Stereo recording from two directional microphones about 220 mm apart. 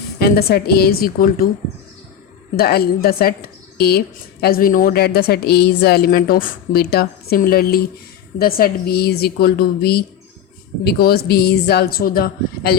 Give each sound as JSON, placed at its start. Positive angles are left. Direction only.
{"t": 0.2, "sound": "a woman's voice", "side_deg": 45}
{"t": 2.6, "sound": "a woman's voice", "side_deg": 45}